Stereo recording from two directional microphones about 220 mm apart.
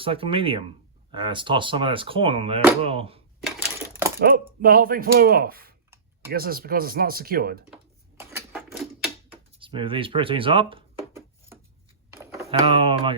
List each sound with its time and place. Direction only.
0.0 s speech: 25° right (ahead or behind)
4.2 s speech: 40° right (ahead or behind)
8.2 s a sound: 5° right (ahead or behind)
9.6 s speech: 25° right (ahead or behind)
12.1 s a sound: 10° right (ahead or behind)
12.5 s speech: 25° right (ahead or behind)